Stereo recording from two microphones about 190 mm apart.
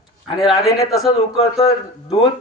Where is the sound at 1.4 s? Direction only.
30° left (ahead or behind).